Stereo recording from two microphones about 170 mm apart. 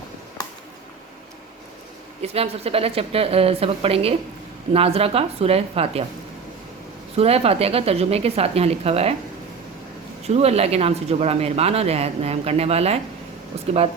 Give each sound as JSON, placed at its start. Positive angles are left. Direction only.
{"t": 2.2, "sound": "speech", "side_deg": -35}
{"t": 7.2, "sound": "speech", "side_deg": -35}
{"t": 10.2, "sound": "speech", "side_deg": -40}